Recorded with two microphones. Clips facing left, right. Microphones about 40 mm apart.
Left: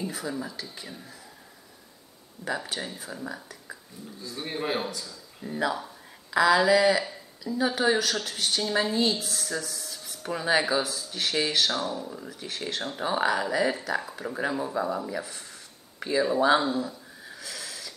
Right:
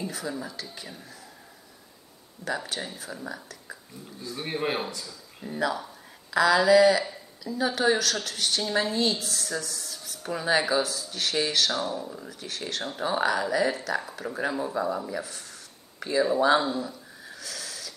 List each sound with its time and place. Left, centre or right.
0.0 s speech: centre
2.4 s speech: centre
4.3 s a man's voice: centre
5.6 s a woman's voice: centre
10.8 s speech: left
11.1 s a woman's voice: centre
15.2 s a sound: centre